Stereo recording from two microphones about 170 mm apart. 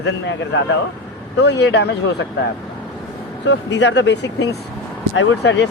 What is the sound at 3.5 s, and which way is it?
Speech, 90° left.